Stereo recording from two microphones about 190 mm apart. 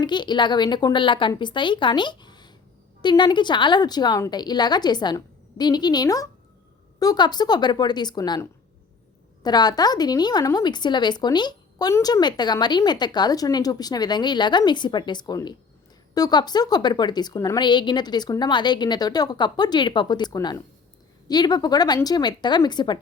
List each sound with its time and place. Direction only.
0.0 s speech: 25° left (ahead or behind)